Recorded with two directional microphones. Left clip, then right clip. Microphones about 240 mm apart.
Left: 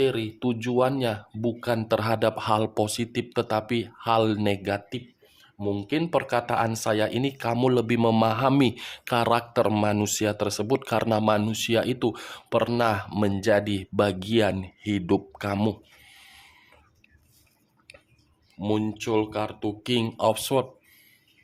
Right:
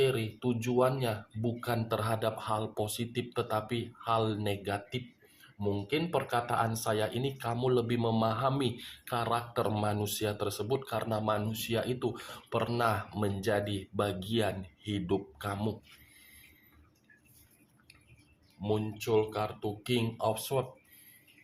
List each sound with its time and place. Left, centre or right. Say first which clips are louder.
0.0 s speech: left 5 dB; left
18.6 s speech: left 6 dB; left